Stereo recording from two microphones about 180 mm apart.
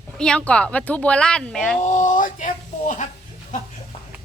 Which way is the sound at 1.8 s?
45° left (ahead or behind).